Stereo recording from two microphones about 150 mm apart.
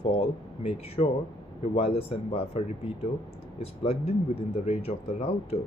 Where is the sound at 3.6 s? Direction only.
45° left (ahead or behind).